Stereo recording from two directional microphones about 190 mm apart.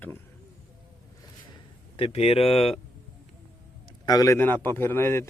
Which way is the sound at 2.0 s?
30° left (ahead or behind).